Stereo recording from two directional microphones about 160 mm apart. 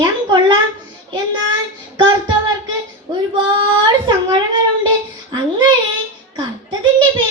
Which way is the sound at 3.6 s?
30° right (ahead or behind).